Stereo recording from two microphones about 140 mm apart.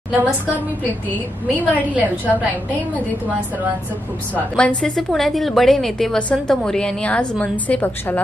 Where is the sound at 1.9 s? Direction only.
10° right (ahead or behind).